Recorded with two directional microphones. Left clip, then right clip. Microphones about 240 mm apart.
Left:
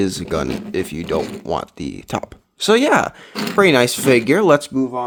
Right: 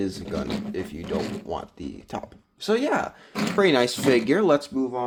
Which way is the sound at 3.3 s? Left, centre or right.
Centre.